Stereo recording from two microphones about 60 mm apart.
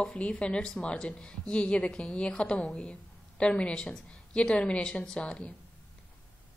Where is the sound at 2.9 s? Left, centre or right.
Centre.